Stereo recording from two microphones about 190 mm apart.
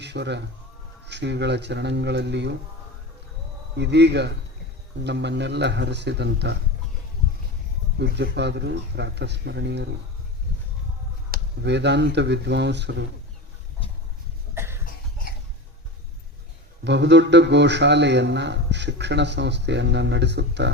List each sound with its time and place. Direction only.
0.0 s a man's voice: 65° right (ahead or behind)
3.8 s a man's voice: 65° right (ahead or behind)
7.9 s a man's voice: 65° right (ahead or behind)
11.3 s a man's voice: 65° right (ahead or behind)
14.5 s cough: 15° right (ahead or behind)
16.8 s a man's voice: 65° right (ahead or behind)